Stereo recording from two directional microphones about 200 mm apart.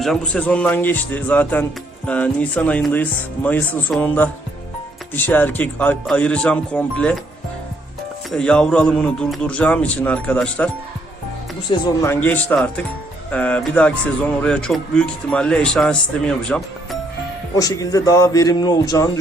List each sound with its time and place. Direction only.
0.0 s speech: 5° left (ahead or behind)
8.3 s speech: 5° left (ahead or behind)
11.7 s speech: 15° left (ahead or behind)
17.5 s speech: 15° left (ahead or behind)